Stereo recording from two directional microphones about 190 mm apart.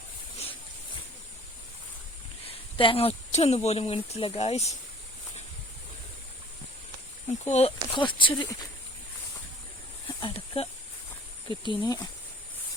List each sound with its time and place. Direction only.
2.5 s speech: 30° left (ahead or behind)
7.4 s speech: 35° left (ahead or behind)
10.2 s speech: 30° left (ahead or behind)